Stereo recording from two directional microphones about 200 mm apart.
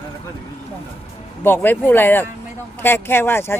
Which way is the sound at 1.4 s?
10° left (ahead or behind).